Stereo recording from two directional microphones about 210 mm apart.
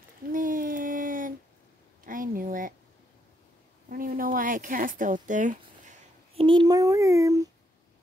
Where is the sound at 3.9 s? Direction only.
40° right (ahead or behind); by 7.4 s 15° right (ahead or behind).